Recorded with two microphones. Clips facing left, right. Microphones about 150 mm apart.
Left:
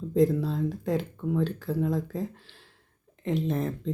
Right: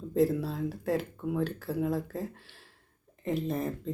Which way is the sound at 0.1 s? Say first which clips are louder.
Left 3 dB; 5° right (ahead or behind).